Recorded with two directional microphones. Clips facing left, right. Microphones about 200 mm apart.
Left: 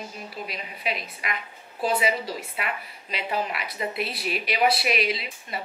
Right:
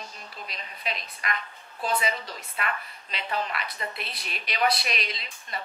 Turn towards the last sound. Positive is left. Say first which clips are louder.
# left 9 dB
turn(degrees=5)  # may be behind; listen again after turning